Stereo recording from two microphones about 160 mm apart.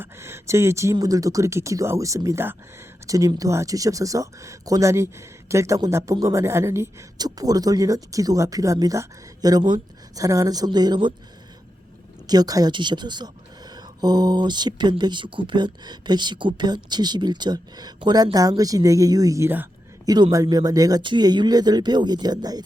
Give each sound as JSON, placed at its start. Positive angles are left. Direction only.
{"t": 0.0, "sound": "speech", "side_deg": -15}
{"t": 12.3, "sound": "speech", "side_deg": -25}